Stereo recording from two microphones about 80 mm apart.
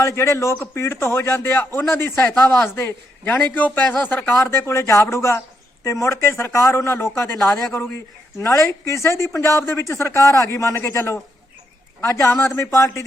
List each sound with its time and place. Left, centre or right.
0.0 s a man's voice: left; by 4.4 s centre
4.4 s a man's voice: left
8.4 s a man's voice: left